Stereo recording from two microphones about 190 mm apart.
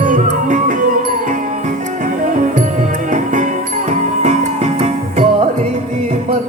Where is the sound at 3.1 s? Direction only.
40° right (ahead or behind).